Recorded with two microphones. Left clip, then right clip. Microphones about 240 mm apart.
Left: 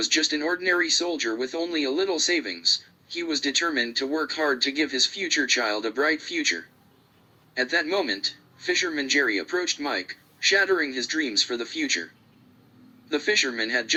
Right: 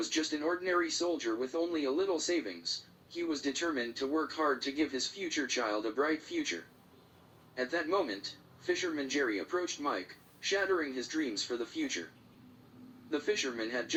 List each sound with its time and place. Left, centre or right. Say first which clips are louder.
0.0 s speech: left 10 dB; left
13.1 s speech: left 10 dB; left